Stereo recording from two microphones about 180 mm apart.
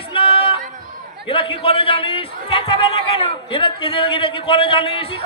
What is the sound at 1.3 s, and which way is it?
A man's voice, 30° left (ahead or behind).